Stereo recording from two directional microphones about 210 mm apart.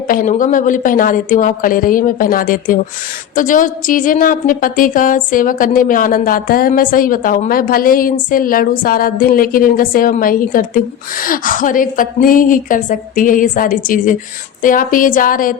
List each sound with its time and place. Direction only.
0.1 s a woman's voice: 40° left (ahead or behind)